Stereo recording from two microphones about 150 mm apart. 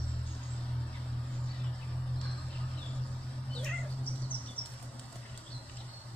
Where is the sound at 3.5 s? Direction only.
10° left (ahead or behind).